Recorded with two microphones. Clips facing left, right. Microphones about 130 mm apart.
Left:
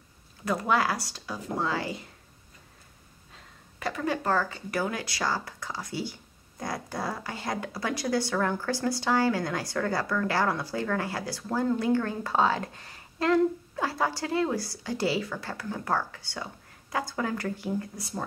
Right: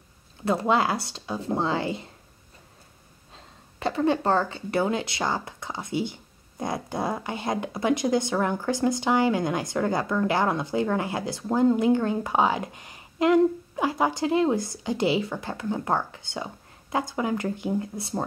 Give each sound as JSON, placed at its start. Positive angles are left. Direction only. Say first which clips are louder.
{"t": 0.5, "sound": "speech", "louder": "right 3 dB", "side_deg": -25}
{"t": 3.3, "sound": "speech", "louder": "right 4 dB", "side_deg": -25}